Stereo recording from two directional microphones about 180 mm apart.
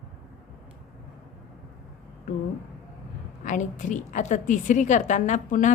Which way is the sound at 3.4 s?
45° left (ahead or behind).